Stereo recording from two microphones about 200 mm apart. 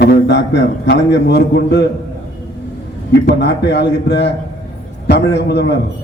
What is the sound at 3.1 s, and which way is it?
A man's voice, 60° left (ahead or behind).